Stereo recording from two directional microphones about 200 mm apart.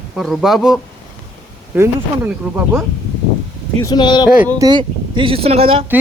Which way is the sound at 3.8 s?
20° left (ahead or behind).